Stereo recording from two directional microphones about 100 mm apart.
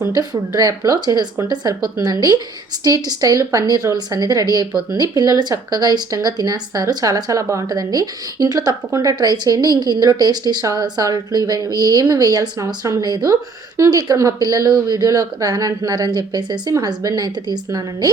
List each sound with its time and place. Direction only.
0.1 s a woman's voice: 40° right (ahead or behind)
13.1 s a woman's voice: 45° right (ahead or behind)